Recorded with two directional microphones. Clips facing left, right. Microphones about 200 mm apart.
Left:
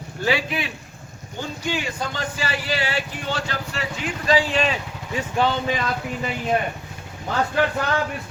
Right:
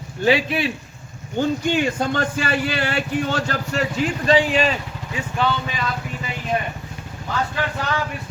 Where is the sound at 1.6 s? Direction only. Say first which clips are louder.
Right 6 dB; 50° right (ahead or behind).